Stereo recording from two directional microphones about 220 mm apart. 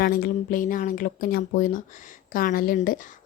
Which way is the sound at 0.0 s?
40° left (ahead or behind).